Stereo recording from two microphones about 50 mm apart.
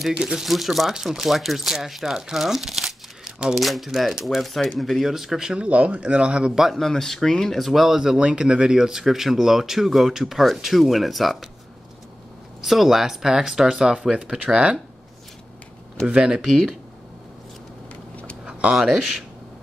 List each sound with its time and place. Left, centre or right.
0.1 s speech: centre
0.5 s speech: centre
3.5 s speech: centre
5.7 s speech: right
6.8 s speech: centre
12.6 s speech: centre; by 14.8 s right
16.2 s speech: centre
18.4 s speech: centre